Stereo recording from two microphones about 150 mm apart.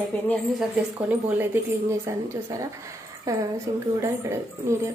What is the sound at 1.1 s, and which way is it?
A woman's voice, 10° right (ahead or behind).